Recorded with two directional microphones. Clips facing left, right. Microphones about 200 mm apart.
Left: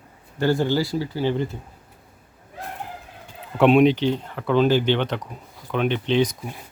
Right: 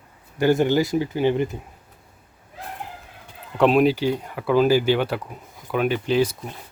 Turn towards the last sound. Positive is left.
turn(degrees=-5)  # may be behind; listen again after turning